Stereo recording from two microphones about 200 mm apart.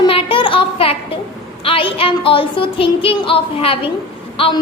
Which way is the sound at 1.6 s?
25° left (ahead or behind).